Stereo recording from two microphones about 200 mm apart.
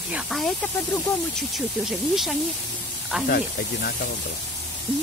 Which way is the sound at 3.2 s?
50° left (ahead or behind).